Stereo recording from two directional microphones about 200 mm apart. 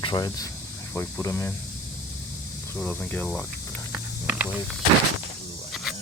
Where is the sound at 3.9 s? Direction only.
10° right (ahead or behind).